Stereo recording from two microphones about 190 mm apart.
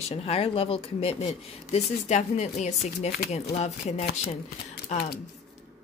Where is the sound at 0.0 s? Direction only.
30° left (ahead or behind).